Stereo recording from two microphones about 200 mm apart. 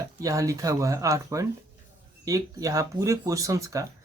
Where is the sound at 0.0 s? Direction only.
15° right (ahead or behind).